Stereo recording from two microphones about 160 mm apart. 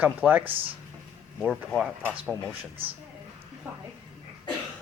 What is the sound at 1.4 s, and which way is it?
Speech, centre (ahead or behind).